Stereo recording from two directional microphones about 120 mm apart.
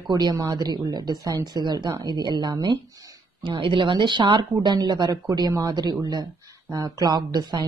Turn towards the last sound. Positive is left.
turn(degrees=-35)  # may be behind; listen again after turning